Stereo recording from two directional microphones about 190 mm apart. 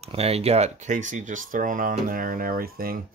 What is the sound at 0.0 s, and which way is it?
Speech, 35° right (ahead or behind).